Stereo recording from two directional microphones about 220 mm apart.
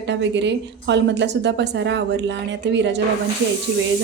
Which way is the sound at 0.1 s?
55° right (ahead or behind).